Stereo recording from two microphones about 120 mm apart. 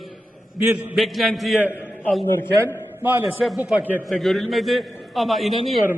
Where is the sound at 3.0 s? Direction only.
15° right (ahead or behind).